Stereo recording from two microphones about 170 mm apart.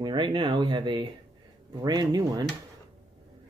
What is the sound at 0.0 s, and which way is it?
Speech, 25° right (ahead or behind).